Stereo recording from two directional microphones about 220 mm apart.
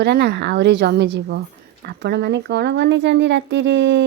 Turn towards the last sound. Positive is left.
turn(degrees=-55)  # may be behind; listen again after turning